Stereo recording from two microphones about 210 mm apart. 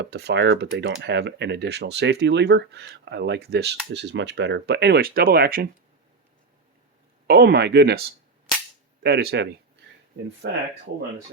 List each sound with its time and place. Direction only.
0.0 s speech: 50° right (ahead or behind)
7.3 s speech: 50° right (ahead or behind)